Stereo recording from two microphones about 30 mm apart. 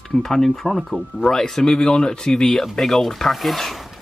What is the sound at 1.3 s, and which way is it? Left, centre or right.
Speech, centre.